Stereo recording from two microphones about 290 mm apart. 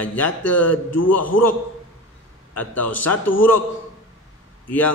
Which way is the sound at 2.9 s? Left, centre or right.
Left.